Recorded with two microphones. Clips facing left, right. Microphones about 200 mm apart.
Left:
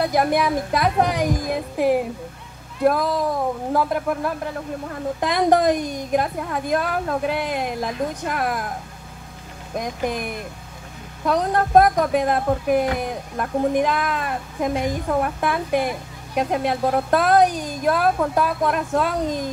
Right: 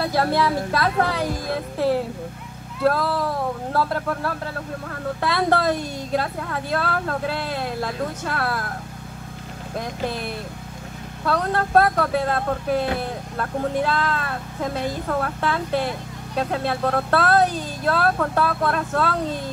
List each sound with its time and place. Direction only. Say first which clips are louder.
0.0 s speech: left 1 dB; 15° left (ahead or behind)
9.8 s speech: left 3 dB; 15° left (ahead or behind)